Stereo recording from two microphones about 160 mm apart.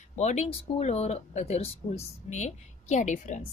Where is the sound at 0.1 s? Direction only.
45° left (ahead or behind).